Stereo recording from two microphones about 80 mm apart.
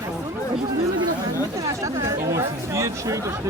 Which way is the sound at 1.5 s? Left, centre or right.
Right.